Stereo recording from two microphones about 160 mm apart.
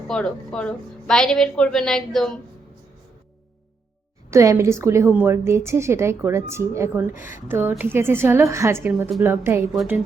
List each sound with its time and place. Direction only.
0.1 s a woman's voice: 5° left (ahead or behind)
4.3 s a woman's voice: 20° right (ahead or behind)